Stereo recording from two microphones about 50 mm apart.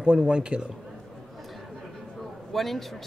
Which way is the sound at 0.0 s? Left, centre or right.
Right.